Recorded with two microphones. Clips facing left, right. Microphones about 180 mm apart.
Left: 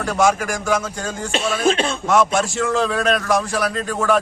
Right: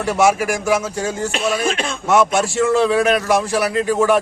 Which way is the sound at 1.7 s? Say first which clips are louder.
Left 2 dB; 30° left (ahead or behind).